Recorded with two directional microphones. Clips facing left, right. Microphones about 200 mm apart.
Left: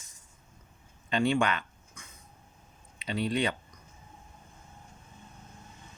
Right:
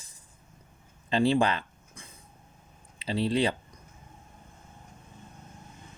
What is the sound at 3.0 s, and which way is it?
Speech, 30° right (ahead or behind).